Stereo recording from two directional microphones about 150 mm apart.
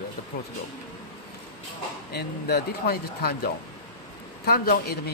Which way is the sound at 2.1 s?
90° left.